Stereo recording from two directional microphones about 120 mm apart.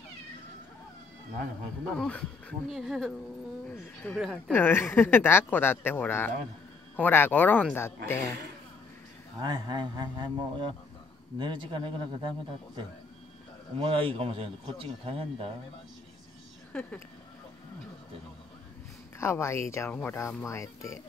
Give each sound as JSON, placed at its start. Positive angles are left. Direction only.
{"t": 2.0, "sound": "a woman's voice", "side_deg": 10}
{"t": 4.5, "sound": "a woman's voice", "side_deg": 20}
{"t": 9.4, "sound": "a man's voice", "side_deg": -40}
{"t": 19.1, "sound": "speech", "side_deg": 20}
{"t": 19.9, "sound": "a woman's voice", "side_deg": 10}
{"t": 20.2, "sound": "speech", "side_deg": 25}